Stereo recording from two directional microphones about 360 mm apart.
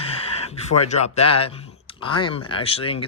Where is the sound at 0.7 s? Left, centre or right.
Centre.